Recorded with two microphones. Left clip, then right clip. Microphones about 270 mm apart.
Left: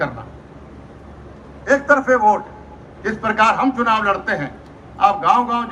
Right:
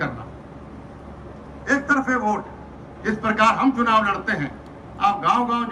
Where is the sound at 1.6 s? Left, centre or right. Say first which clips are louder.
Left 6 dB; centre.